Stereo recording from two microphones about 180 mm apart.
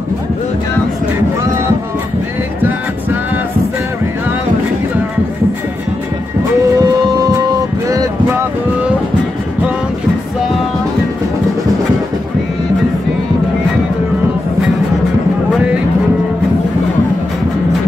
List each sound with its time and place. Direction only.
6.8 s music: 20° right (ahead or behind)
7.9 s boat: 15° right (ahead or behind)